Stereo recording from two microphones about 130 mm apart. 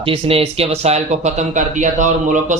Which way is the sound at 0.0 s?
45° right (ahead or behind).